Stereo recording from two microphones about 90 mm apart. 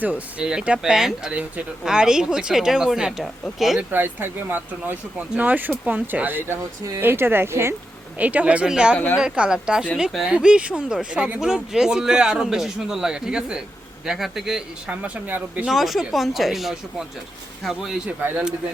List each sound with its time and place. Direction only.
0.0 s speech: 15° right (ahead or behind)
3.8 s speech: 20° right (ahead or behind)
8.2 s speech: 15° right (ahead or behind); by 10.2 s centre (ahead or behind)
10.2 s speech: 10° right (ahead or behind)
15.6 s speech: centre (ahead or behind)
18.2 s speech: 20° right (ahead or behind)